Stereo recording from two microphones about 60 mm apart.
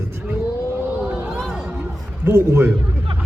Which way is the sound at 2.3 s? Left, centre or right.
Right.